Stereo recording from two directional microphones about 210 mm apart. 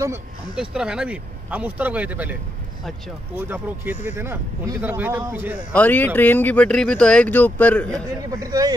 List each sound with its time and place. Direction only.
0.6 s speech: 5° right (ahead or behind)
3.3 s speech: 10° right (ahead or behind)
5.7 s speech: 5° left (ahead or behind)
8.2 s speech: 15° right (ahead or behind)